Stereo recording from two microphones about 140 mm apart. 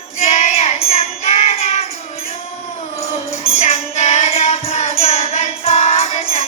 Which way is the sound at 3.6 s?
50° left (ahead or behind).